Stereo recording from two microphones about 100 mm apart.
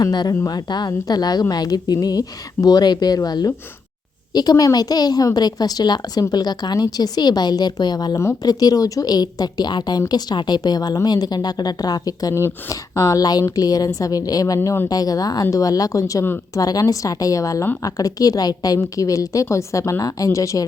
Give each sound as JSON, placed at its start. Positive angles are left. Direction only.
{"t": 0.0, "sound": "a woman's voice", "side_deg": 45}
{"t": 8.1, "sound": "speech", "side_deg": 25}
{"t": 8.4, "sound": "a woman's voice", "side_deg": 40}